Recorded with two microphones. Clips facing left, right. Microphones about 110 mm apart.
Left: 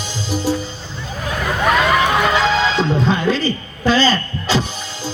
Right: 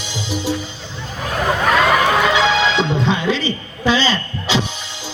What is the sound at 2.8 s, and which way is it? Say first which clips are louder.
Music: left 1 dB; 40° left (ahead or behind).